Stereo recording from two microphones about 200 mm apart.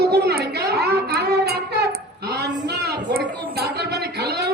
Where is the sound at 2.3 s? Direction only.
55° right (ahead or behind).